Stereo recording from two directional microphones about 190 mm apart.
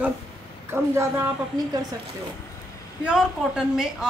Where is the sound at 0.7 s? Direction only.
15° right (ahead or behind).